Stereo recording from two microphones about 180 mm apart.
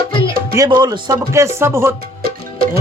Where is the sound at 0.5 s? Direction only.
20° right (ahead or behind).